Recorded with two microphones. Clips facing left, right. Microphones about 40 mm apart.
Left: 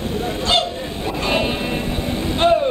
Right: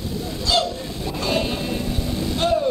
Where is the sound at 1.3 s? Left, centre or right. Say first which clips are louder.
Left 3 dB; left.